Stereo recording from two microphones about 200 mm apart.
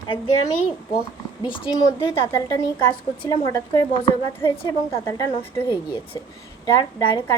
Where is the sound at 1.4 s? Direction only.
25° left (ahead or behind).